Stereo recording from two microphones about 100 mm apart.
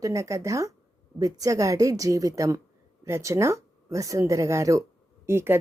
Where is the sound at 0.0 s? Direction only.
30° right (ahead or behind).